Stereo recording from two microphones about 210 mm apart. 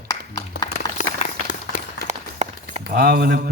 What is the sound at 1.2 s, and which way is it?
Run, 40° left (ahead or behind).